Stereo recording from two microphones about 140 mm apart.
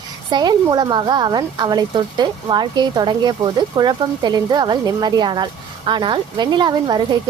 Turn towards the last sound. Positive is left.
turn(degrees=-30)  # may be behind; listen again after turning